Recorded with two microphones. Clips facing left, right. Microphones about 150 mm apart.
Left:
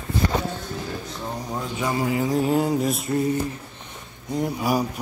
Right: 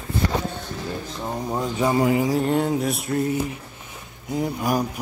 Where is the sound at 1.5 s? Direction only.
25° right (ahead or behind).